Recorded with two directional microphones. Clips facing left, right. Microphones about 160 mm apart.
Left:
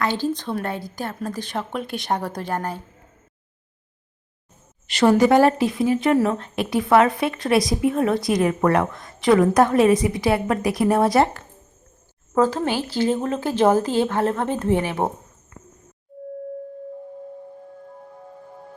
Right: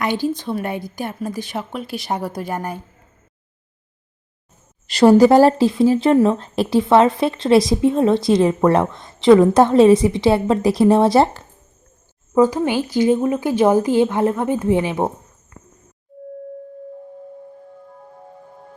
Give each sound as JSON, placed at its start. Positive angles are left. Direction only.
{"t": 0.0, "sound": "a woman's voice", "side_deg": -15}
{"t": 4.9, "sound": "speech", "side_deg": -35}
{"t": 12.3, "sound": "a woman's voice", "side_deg": -15}